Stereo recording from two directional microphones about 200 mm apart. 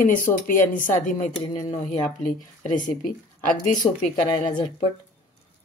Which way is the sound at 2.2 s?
40° left (ahead or behind).